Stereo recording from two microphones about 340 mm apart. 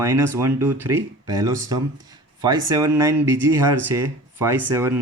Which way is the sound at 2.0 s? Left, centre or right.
Centre.